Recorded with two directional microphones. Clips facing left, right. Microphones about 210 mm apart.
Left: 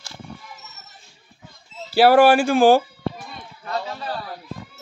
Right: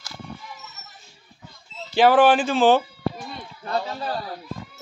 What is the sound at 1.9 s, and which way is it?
Speech, 10° left (ahead or behind).